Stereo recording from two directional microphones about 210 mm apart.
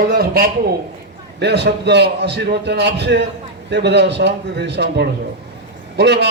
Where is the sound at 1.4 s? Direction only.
55° right (ahead or behind).